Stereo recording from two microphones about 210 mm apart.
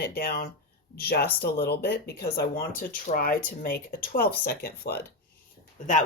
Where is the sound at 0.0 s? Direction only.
45° left (ahead or behind).